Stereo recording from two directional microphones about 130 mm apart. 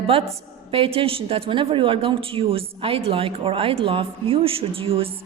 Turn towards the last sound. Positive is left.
turn(degrees=-45)  # may be behind; listen again after turning